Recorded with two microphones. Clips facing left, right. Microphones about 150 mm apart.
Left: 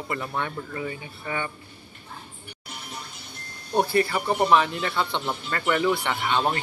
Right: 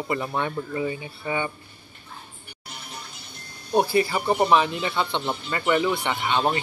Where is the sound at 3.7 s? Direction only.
10° right (ahead or behind).